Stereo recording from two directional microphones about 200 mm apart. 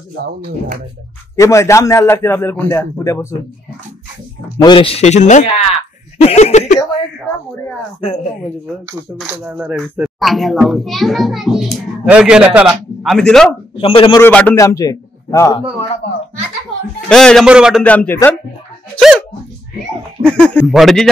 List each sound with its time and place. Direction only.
1.3 s a man's voice: 15° left (ahead or behind)
4.6 s speech: 25° left (ahead or behind)
8.0 s speech: 30° left (ahead or behind)
9.3 s a child's voice: 10° right (ahead or behind)
13.7 s a man's voice: 25° left (ahead or behind)
14.2 s a man's voice: 10° left (ahead or behind)
17.1 s a child's voice: 5° left (ahead or behind)
17.8 s a man's voice: 10° left (ahead or behind)
18.9 s a child's voice: centre (ahead or behind)
20.3 s a child's voice: 5° left (ahead or behind)